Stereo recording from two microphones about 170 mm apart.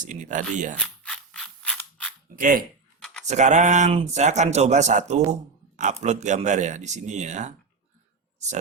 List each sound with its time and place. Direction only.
0.0 s speech: 45° right (ahead or behind)
1.0 s mechanisms: 5° left (ahead or behind)
2.3 s speech: 55° right (ahead or behind)
3.2 s speech: 45° right (ahead or behind)